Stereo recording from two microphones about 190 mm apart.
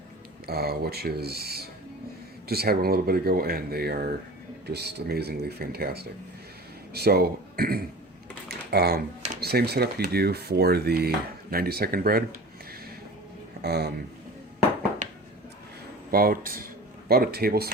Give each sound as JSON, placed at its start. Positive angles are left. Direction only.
{"t": 0.4, "sound": "speech", "side_deg": -55}
{"t": 8.4, "sound": "typing", "side_deg": -60}
{"t": 9.4, "sound": "speech", "side_deg": -55}
{"t": 13.6, "sound": "speech", "side_deg": -60}
{"t": 16.1, "sound": "speech", "side_deg": -50}